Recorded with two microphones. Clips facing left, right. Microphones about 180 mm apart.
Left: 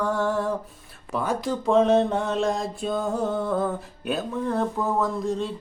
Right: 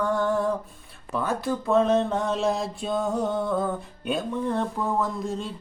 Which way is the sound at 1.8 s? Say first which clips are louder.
Left 3 dB; 70° left (ahead or behind).